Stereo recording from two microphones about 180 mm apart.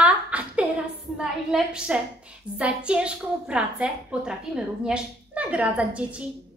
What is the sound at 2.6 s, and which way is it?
A woman's voice, 5° right (ahead or behind).